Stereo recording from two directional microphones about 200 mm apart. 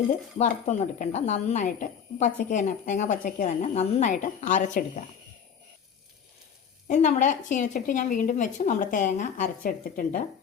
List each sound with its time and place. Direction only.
0.3 s speech: 40° left (ahead or behind)
6.8 s speech: 35° left (ahead or behind)